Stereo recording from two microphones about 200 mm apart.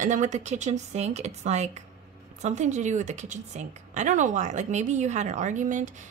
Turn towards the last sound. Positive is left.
turn(degrees=-40)  # may be behind; listen again after turning